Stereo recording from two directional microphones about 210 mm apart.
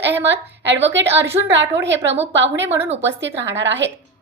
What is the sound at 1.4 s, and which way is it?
Speech, 60° right (ahead or behind).